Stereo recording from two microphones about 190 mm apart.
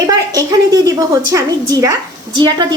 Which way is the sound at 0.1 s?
20° right (ahead or behind).